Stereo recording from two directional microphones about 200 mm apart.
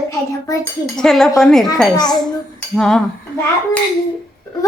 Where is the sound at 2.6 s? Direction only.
5° left (ahead or behind).